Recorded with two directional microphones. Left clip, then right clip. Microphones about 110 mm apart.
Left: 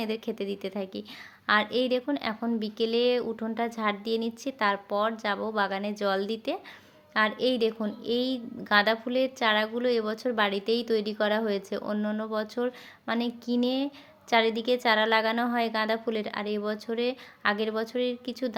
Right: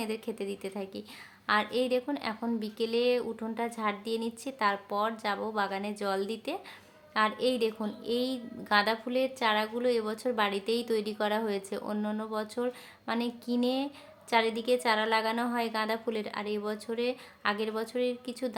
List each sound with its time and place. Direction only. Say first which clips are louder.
0.0 s a woman's voice: left 3 dB; 25° left (ahead or behind)